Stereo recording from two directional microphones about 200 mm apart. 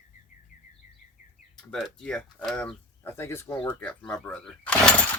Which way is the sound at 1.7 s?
5° left (ahead or behind).